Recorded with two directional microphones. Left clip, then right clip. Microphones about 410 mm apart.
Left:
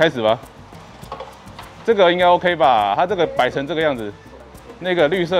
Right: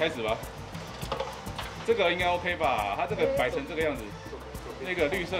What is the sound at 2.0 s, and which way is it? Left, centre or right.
Speech, left.